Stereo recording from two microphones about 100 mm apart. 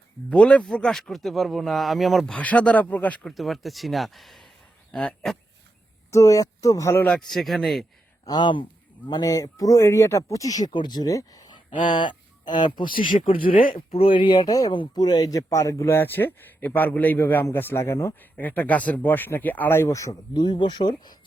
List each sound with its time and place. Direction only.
0.3 s speech: 10° left (ahead or behind)
3.3 s speech: centre (ahead or behind)
6.1 s speech: 30° left (ahead or behind)
7.1 s speech: 5° left (ahead or behind)
8.3 s speech: 50° left (ahead or behind)
10.7 s speech: 50° left (ahead or behind)
11.5 s speech: 50° left (ahead or behind); by 20.1 s 30° left (ahead or behind)
20.3 s speech: 50° left (ahead or behind)